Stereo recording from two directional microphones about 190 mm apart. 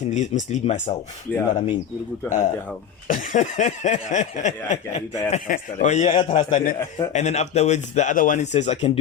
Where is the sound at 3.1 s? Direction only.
45° left (ahead or behind).